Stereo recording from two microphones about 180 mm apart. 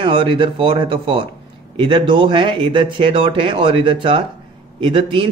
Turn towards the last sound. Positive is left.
turn(degrees=-30)  # may be behind; listen again after turning